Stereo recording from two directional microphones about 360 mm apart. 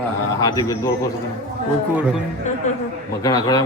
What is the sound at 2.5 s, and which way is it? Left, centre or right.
A man's voice, centre.